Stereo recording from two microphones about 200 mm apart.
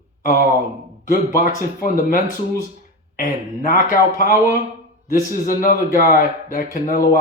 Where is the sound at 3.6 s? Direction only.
45° left (ahead or behind).